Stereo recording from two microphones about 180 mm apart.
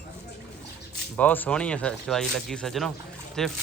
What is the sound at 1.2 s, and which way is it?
Speech, 10° left (ahead or behind).